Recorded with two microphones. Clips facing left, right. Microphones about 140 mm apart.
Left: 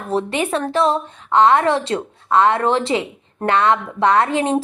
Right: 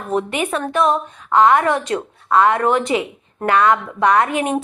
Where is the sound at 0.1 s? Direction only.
30° left (ahead or behind).